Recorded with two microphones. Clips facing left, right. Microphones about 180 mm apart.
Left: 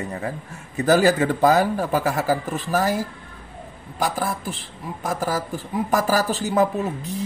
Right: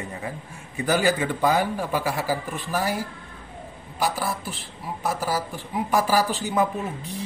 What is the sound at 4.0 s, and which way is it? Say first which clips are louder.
A man's voice: left 2 dB; 50° left (ahead or behind).